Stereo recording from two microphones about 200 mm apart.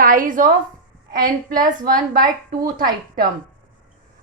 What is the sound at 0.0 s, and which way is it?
A woman's voice, 45° right (ahead or behind).